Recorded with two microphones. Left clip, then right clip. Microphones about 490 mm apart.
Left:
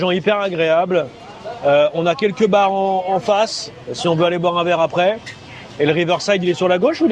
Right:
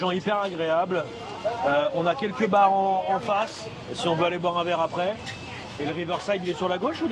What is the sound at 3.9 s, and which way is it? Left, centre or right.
A man's voice, left.